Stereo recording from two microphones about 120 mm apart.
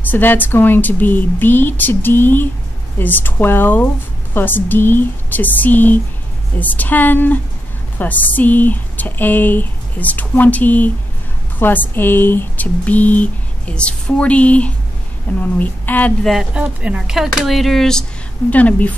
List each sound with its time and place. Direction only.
0.0 s speech: 15° left (ahead or behind)
16.3 s speech: 5° right (ahead or behind); by 18.9 s 10° left (ahead or behind)